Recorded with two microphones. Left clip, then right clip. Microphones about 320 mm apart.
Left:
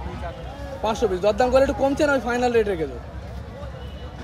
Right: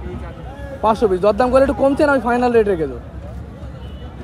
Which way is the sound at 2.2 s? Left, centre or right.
Centre.